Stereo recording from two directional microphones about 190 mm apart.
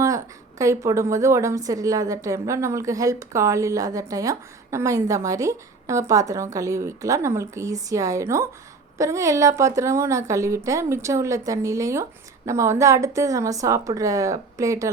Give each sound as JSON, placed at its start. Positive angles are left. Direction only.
{"t": 0.6, "sound": "a woman's voice", "side_deg": -15}